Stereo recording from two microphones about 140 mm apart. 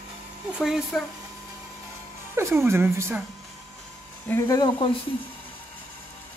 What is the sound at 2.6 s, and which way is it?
Speech, 20° right (ahead or behind).